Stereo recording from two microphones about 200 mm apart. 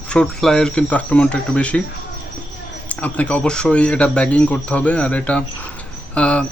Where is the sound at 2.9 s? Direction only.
5° left (ahead or behind).